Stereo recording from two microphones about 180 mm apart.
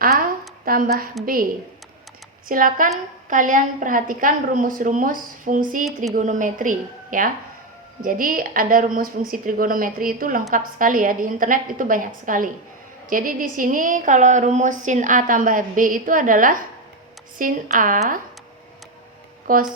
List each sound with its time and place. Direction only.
0.0 s a sound: 50° right (ahead or behind)
1.2 s a woman's voice: 55° right (ahead or behind)
2.5 s a woman's voice: 50° right (ahead or behind)
19.5 s a woman's voice: 50° right (ahead or behind)